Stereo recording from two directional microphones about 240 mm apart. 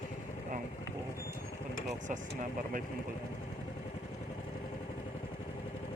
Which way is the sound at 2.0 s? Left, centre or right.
Right.